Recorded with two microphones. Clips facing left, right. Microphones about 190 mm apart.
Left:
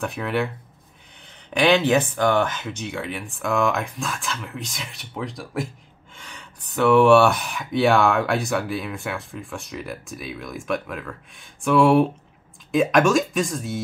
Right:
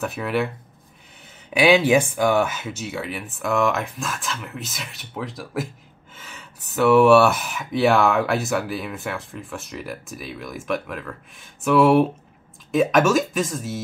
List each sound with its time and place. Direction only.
0.0 s speech: 5° right (ahead or behind)
1.5 s speech: 10° right (ahead or behind)